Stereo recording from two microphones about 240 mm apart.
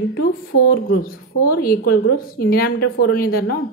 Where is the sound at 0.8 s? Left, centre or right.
Left.